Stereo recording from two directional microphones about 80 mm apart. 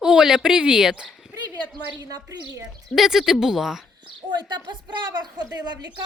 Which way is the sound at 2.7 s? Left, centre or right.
Centre.